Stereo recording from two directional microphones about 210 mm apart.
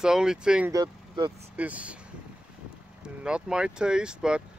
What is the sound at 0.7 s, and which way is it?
Speech, 20° right (ahead or behind).